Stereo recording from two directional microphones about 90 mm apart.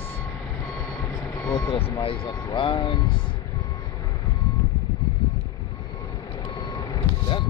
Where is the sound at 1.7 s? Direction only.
80° left.